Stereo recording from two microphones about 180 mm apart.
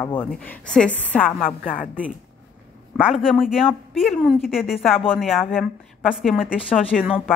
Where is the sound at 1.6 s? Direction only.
50° left (ahead or behind).